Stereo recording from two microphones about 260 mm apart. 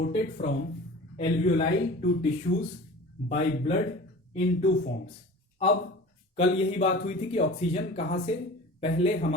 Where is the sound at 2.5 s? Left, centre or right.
Left.